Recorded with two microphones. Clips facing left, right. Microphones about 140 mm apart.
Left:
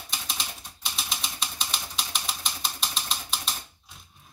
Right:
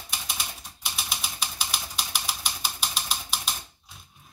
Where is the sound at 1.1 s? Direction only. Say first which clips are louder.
Even; 5° right (ahead or behind).